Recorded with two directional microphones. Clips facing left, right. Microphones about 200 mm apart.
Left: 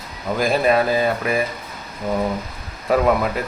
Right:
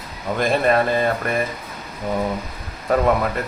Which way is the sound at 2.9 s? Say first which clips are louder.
Left 1 dB; 5° left (ahead or behind).